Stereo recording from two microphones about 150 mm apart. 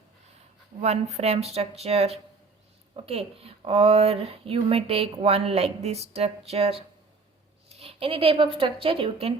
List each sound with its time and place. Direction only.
0.8 s speech: 45° right (ahead or behind)